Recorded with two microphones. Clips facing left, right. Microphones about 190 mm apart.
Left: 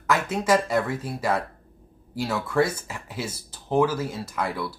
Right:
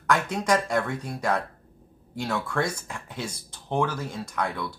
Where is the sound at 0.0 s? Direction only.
5° left (ahead or behind).